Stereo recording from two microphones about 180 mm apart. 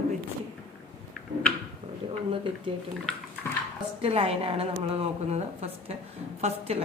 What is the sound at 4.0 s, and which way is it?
A woman's voice, 35° right (ahead or behind).